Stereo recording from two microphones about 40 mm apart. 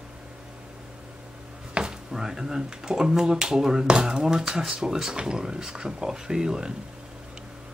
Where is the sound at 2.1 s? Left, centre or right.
Centre.